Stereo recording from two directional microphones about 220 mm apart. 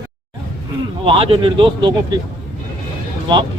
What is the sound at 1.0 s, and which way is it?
A man's voice, 25° right (ahead or behind).